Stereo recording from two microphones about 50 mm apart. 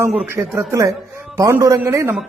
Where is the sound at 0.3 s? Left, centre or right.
Right.